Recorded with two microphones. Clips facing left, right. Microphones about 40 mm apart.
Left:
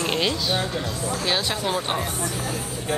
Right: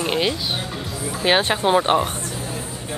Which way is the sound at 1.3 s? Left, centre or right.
Right.